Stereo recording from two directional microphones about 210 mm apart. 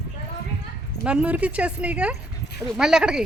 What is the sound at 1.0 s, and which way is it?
A woman's voice, 5° right (ahead or behind).